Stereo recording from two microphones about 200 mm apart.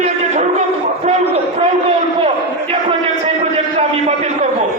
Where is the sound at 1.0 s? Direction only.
30° right (ahead or behind).